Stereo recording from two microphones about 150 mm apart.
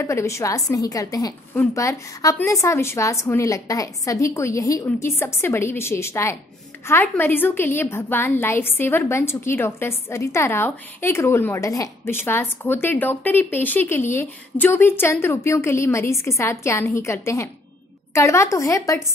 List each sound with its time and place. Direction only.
0.0 s a woman's voice: 20° left (ahead or behind)